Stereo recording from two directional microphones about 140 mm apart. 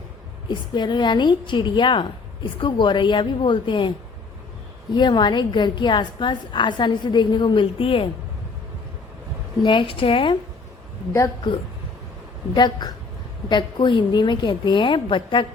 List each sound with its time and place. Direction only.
0.4 s a woman's voice: 30° left (ahead or behind)
4.9 s a woman's voice: 30° left (ahead or behind)
9.6 s a woman's voice: 40° left (ahead or behind)
11.5 s a woman's voice: 35° left (ahead or behind)